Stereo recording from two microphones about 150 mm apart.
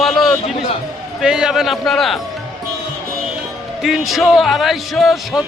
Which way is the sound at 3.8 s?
Centre (ahead or behind).